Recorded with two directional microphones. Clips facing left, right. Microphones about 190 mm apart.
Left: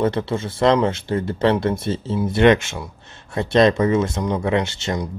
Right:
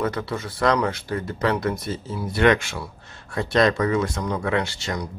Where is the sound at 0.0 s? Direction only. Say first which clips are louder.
Left 5 dB; 25° left (ahead or behind).